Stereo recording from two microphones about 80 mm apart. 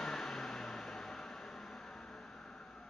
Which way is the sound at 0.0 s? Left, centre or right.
Centre.